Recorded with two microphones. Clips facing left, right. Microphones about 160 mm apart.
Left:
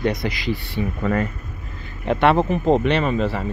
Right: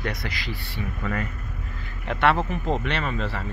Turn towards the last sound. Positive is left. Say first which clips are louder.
# left 8 dB
turn(degrees=15)  # may be behind; listen again after turning